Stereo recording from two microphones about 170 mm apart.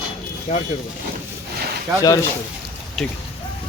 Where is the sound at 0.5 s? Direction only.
40° left (ahead or behind).